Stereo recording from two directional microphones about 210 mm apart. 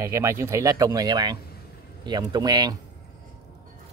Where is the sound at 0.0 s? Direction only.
15° right (ahead or behind).